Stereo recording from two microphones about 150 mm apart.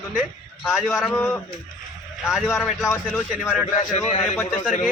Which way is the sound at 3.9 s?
55° left (ahead or behind).